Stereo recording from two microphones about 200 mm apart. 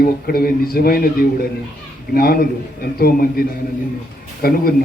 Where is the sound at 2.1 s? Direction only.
50° left (ahead or behind).